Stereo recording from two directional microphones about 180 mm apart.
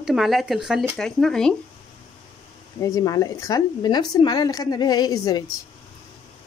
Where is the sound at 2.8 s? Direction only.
20° left (ahead or behind).